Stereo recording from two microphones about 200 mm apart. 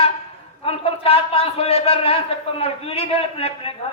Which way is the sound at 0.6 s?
30° left (ahead or behind).